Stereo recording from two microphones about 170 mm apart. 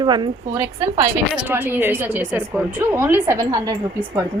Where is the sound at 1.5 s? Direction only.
10° right (ahead or behind).